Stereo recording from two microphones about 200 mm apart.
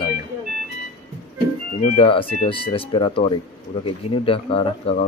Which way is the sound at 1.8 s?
25° left (ahead or behind).